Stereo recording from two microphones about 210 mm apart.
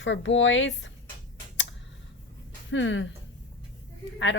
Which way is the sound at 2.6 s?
60° left (ahead or behind).